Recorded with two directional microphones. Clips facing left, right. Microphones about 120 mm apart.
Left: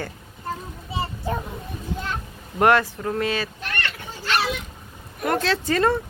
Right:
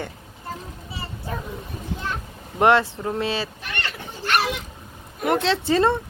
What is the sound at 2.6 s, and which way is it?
Speech, 25° right (ahead or behind).